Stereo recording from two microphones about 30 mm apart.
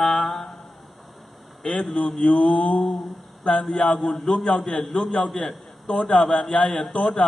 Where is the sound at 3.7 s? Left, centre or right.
Centre.